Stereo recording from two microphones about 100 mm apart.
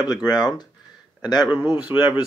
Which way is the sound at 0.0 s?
40° left (ahead or behind).